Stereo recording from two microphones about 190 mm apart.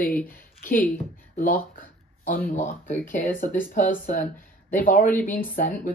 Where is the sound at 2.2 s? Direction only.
45° left (ahead or behind).